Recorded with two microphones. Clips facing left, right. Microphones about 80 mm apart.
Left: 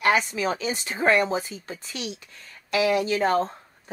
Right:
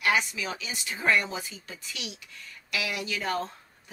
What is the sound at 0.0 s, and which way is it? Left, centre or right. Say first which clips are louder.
Speech: left 5 dB; left.